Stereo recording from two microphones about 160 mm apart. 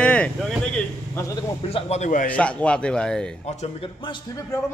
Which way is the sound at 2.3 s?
10° left (ahead or behind).